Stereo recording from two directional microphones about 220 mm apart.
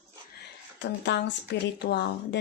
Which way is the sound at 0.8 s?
55° left (ahead or behind).